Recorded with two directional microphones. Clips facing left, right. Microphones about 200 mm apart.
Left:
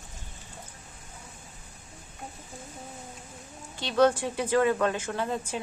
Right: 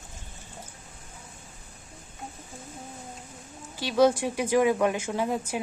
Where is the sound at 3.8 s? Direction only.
10° right (ahead or behind).